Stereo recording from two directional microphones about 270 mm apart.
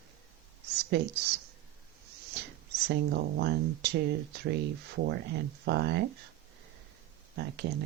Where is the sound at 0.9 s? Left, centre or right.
Right.